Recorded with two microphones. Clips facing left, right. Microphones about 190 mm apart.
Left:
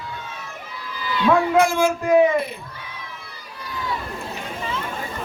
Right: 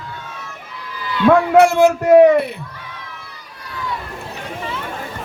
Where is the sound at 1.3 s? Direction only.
70° right (ahead or behind).